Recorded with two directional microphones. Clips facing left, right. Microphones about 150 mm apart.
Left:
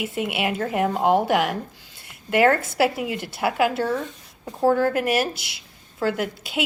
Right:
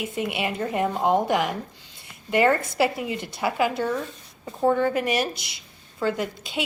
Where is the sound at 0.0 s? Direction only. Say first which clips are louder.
Left 2 dB; centre (ahead or behind).